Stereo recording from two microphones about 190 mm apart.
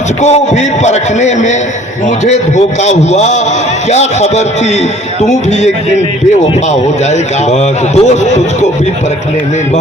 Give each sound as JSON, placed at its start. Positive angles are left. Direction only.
{"t": 0.2, "sound": "a man's voice", "side_deg": 35}
{"t": 2.8, "sound": "a man's voice", "side_deg": 35}
{"t": 7.1, "sound": "a man's voice", "side_deg": 35}